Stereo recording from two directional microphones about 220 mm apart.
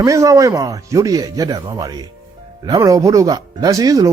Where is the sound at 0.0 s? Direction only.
15° right (ahead or behind).